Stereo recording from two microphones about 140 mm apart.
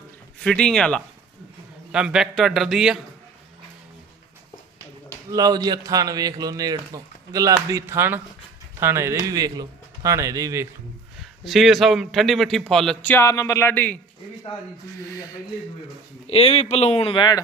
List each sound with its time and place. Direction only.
0.3 s a man's voice: 5° left (ahead or behind)
1.9 s a man's voice: 5° right (ahead or behind)
5.0 s a man's voice: 25° right (ahead or behind)
11.2 s a man's voice: centre (ahead or behind)
15.0 s speech: 25° left (ahead or behind)
16.2 s speech: 45° left (ahead or behind)